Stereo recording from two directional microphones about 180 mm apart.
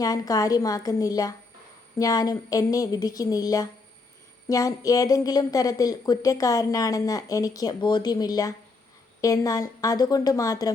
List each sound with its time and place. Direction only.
0.0 s a woman's voice: 20° left (ahead or behind)